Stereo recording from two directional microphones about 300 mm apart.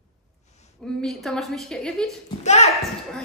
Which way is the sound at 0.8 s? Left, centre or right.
Centre.